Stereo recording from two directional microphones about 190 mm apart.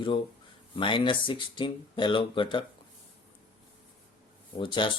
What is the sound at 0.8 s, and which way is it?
Speech, 25° left (ahead or behind).